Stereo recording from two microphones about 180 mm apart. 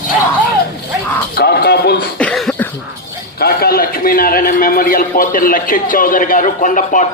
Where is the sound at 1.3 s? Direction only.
60° left (ahead or behind).